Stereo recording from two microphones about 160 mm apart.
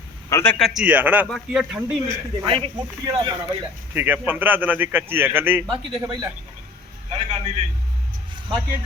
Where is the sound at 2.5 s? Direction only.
35° right (ahead or behind).